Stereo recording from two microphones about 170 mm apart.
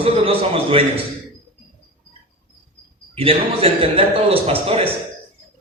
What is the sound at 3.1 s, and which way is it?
A man's voice, 35° right (ahead or behind).